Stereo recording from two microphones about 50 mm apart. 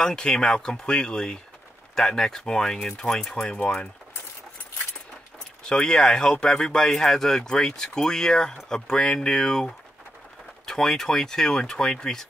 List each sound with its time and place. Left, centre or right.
0.0 s speech: centre
5.6 s speech: centre